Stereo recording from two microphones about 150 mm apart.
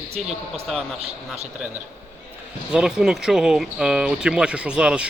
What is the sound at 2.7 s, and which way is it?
Speech, 5° right (ahead or behind).